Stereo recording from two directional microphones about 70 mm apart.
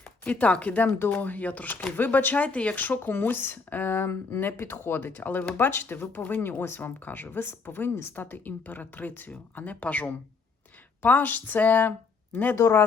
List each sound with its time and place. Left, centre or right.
0.3 s speech: centre
0.9 s speech: left
12.5 s speech: left